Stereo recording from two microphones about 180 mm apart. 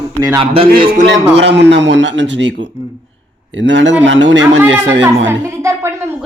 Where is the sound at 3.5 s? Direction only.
90° right.